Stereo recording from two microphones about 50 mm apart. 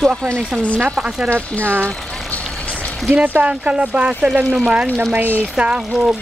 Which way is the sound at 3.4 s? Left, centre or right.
Right.